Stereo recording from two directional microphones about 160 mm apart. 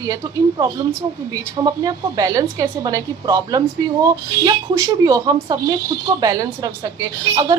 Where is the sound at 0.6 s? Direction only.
20° right (ahead or behind).